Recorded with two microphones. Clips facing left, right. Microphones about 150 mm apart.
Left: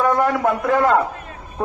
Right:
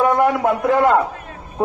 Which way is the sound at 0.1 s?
20° right (ahead or behind).